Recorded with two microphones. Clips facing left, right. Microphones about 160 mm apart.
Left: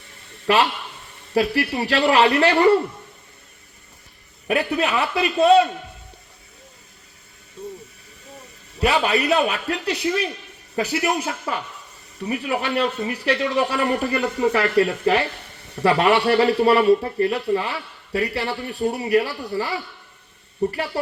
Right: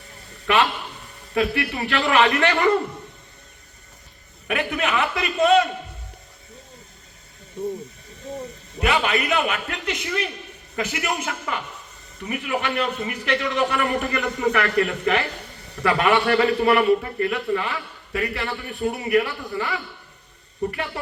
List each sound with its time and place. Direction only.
0.4 s a man's voice: 35° left (ahead or behind)
4.4 s a man's voice: 35° left (ahead or behind)
7.6 s speech: 20° right (ahead or behind)
8.8 s a man's voice: 35° left (ahead or behind)